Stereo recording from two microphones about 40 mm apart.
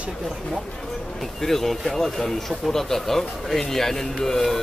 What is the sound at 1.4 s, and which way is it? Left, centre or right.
Speech, centre.